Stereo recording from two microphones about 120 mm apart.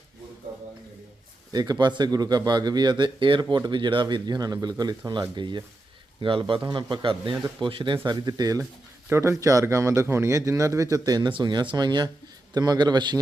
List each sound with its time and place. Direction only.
1.5 s speech: 35° right (ahead or behind)
8.0 s a man's voice: 35° right (ahead or behind)